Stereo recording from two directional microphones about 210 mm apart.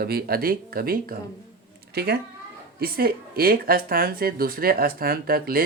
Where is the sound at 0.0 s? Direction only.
45° right (ahead or behind).